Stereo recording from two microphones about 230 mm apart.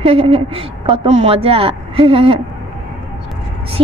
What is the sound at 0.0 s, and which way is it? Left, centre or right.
A woman's voice, right.